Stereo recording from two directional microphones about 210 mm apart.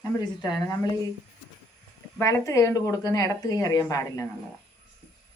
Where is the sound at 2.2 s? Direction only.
15° left (ahead or behind).